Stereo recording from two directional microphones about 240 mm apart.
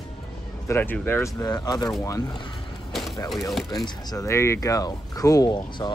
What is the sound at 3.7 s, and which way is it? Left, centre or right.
Speech, centre.